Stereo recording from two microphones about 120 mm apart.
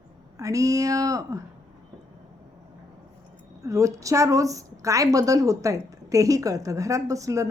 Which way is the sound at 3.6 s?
25° right (ahead or behind).